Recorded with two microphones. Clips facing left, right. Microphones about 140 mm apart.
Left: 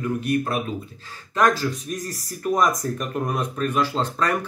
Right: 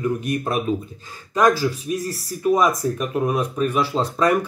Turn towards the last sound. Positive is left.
turn(degrees=-10)  # may be behind; listen again after turning